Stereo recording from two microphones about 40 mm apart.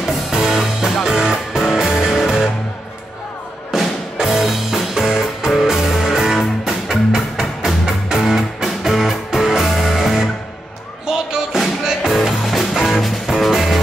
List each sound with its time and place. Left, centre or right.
0.0 s music: centre
1.0 s music: centre
3.7 s music: centre
12.1 s music: centre